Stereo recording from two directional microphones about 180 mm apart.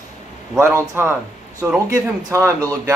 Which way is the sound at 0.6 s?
15° right (ahead or behind).